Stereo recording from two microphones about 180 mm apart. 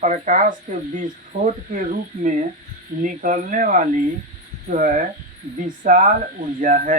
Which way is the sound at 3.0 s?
45° right (ahead or behind).